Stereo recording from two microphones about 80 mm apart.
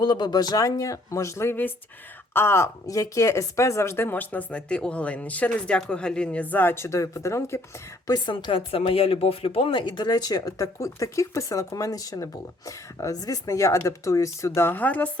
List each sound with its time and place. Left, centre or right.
0.0 s speech: left
2.8 s speech: left
8.3 s a woman's voice: left
9.7 s speech: left